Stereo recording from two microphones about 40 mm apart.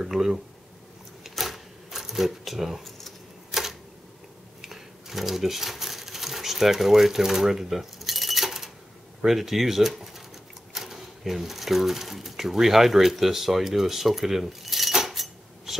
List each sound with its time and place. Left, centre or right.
0.1 s speech: centre
1.2 s typewriter: centre
4.6 s a sound: centre
9.2 s speech: centre